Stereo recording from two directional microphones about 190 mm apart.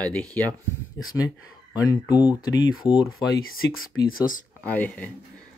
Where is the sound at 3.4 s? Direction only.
90° left.